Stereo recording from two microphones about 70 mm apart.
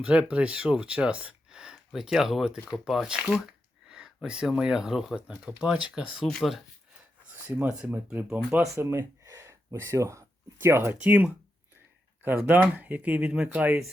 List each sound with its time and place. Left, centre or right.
0.0 s speech: centre
6.2 s speech: centre
7.4 s speech: right
7.7 s speech: centre
8.6 s speech: right
11.0 s speech: right
13.5 s speech: right